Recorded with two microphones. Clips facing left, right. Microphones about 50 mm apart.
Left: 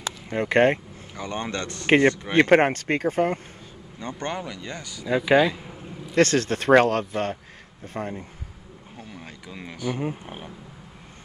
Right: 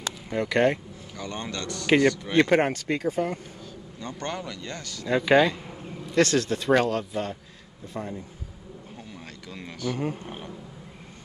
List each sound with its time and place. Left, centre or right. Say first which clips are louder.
0.4 s speech: left 3 dB; left
2.4 s speech: left 8 dB; left
4.0 s speech: left 3 dB; left; by 6.1 s centre
6.1 s speech: left 2 dB; left
9.2 s speech: left 1 dB; centre